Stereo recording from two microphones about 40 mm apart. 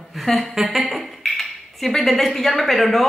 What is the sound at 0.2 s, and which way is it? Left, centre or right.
A woman's voice, centre.